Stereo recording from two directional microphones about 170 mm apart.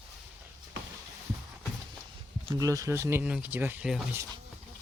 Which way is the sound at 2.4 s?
25° right (ahead or behind).